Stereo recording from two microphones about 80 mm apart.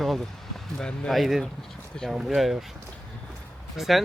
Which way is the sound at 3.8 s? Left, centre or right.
Centre.